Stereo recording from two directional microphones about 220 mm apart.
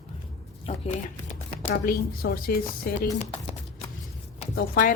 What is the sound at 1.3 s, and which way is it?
Speech, 35° left (ahead or behind).